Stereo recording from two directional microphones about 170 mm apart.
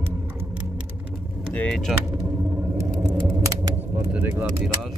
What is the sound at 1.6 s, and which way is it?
Speech, 5° left (ahead or behind).